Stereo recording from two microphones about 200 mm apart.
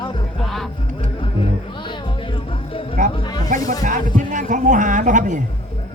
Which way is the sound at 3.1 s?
25° left (ahead or behind).